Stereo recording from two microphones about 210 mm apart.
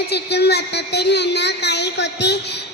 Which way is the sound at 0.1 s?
50° left (ahead or behind).